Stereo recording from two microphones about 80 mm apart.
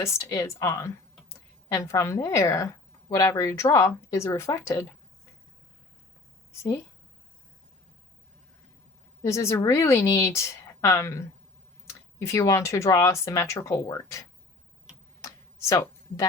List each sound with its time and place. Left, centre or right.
0.0 s a woman's voice: left
9.2 s a woman's voice: left
15.2 s a sound: left